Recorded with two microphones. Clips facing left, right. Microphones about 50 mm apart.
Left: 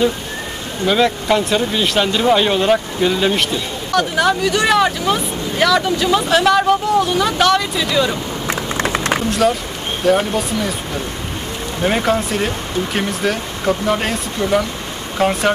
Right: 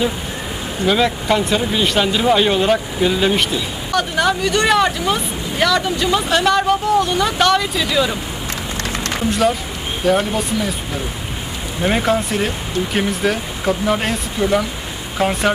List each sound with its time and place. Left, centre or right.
0.8 s speech: centre
8.5 s a sound: left
9.3 s speech: centre
11.8 s speech: centre